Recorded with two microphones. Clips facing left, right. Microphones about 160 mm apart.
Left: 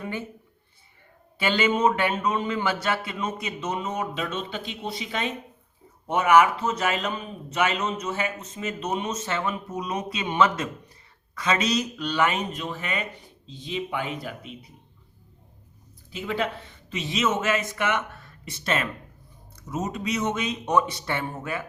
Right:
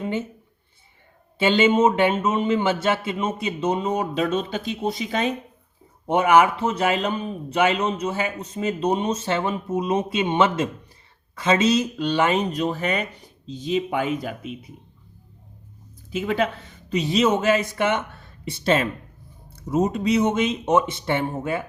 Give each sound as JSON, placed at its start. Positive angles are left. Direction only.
{"t": 0.0, "sound": "a sound", "side_deg": -20}
{"t": 1.4, "sound": "speech", "side_deg": -25}
{"t": 6.1, "sound": "speech", "side_deg": -30}
{"t": 14.2, "sound": "speech", "side_deg": -50}
{"t": 16.1, "sound": "speech", "side_deg": -50}
{"t": 16.9, "sound": "speech", "side_deg": -40}